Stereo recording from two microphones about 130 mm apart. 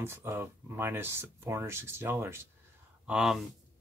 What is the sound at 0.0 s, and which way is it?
Speech, 20° right (ahead or behind).